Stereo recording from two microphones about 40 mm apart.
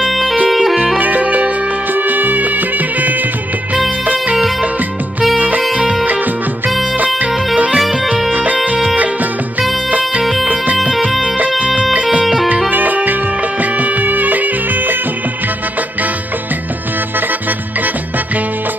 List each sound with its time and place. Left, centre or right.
0.1 s music: centre
0.9 s music: right
1.9 s music: right
5.7 s music: right
6.0 s music: right
7.5 s music: right
10.2 s music: centre
10.5 s music: right
12.7 s music: right
17.3 s music: right